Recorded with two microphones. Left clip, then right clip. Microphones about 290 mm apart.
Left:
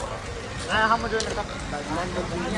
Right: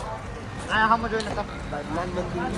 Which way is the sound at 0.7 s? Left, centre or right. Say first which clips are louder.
Right 1 dB; right.